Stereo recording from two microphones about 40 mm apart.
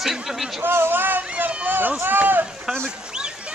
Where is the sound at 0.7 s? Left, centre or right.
Right.